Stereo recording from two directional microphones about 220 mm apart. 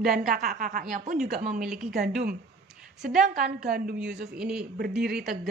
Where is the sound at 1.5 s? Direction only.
5° right (ahead or behind).